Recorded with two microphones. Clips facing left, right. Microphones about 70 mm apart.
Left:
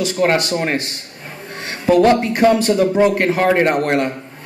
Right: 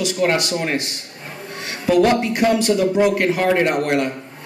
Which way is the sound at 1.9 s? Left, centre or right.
Left.